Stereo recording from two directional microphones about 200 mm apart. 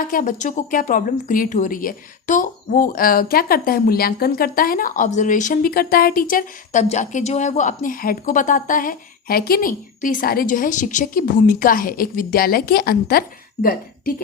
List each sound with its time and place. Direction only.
0.1 s speech: 45° left (ahead or behind)